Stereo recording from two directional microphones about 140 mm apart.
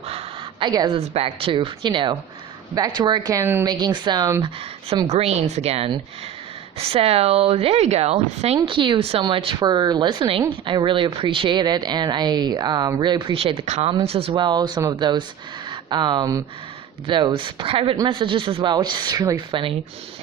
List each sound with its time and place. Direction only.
0.6 s a woman's voice: 30° right (ahead or behind)
0.9 s a woman's voice: 45° right (ahead or behind)
3.4 s a woman's voice: 15° right (ahead or behind)
3.7 s speech: 30° right (ahead or behind)
5.0 s a woman's voice: 50° right (ahead or behind)
8.6 s a woman's voice: 35° right (ahead or behind)
13.7 s speech: 55° right (ahead or behind)
13.9 s a woman's voice: 45° right (ahead or behind); by 19.4 s 25° right (ahead or behind)
19.5 s a woman's voice: 40° right (ahead or behind)